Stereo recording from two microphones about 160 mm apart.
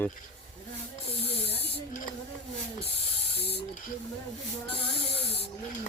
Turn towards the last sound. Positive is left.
turn(degrees=40)  # may be behind; listen again after turning